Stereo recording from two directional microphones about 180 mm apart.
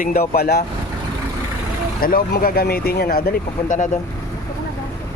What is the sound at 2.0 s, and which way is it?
Speech, 50° left (ahead or behind).